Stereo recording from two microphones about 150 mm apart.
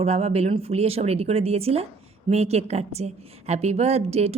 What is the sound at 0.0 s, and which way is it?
A woman's voice, 45° right (ahead or behind).